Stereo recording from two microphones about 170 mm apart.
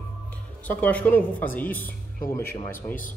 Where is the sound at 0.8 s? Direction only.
10° left (ahead or behind).